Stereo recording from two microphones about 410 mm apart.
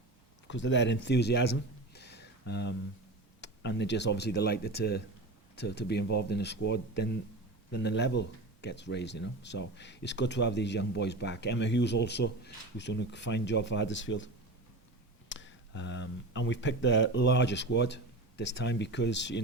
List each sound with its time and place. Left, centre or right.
0.4 s speech: left
15.3 s speech: left